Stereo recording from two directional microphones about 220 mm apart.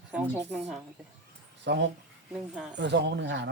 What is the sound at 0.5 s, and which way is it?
Speech, centre (ahead or behind).